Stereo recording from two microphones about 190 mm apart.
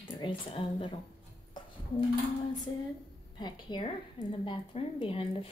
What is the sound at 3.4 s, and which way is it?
A woman's voice, 25° left (ahead or behind).